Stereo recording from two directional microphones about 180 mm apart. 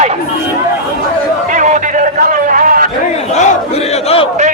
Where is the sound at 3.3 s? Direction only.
35° left (ahead or behind).